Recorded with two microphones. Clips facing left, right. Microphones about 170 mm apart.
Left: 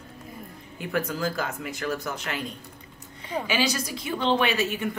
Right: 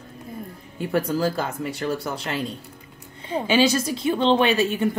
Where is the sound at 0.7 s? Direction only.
35° right (ahead or behind).